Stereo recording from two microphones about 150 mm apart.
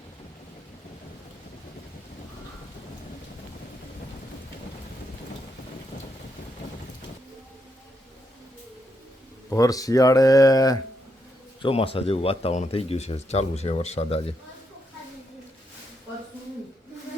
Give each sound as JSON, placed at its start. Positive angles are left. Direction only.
{"t": 9.5, "sound": "speech", "side_deg": 25}
{"t": 11.6, "sound": "speech", "side_deg": 40}